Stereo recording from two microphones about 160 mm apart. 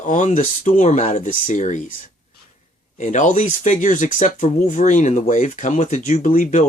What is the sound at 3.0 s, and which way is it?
Speech, 50° left (ahead or behind).